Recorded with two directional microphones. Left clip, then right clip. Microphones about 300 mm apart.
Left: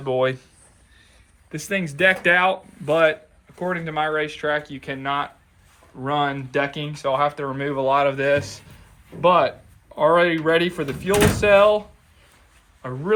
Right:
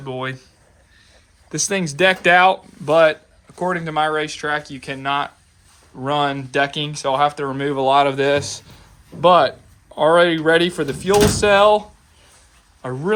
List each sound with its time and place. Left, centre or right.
0.0 s speech: centre
1.5 s speech: centre
12.8 s speech: centre